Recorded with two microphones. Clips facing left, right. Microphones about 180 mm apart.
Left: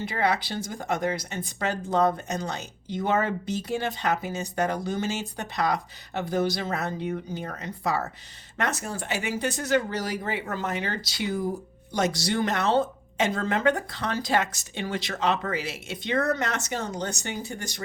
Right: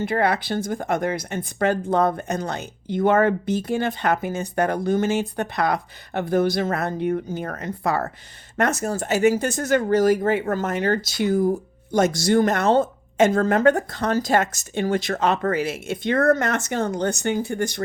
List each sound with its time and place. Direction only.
0.0 s speech: 55° right (ahead or behind)